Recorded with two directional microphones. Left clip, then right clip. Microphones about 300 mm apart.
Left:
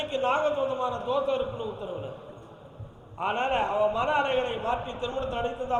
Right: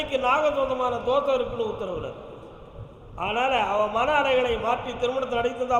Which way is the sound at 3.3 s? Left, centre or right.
Left.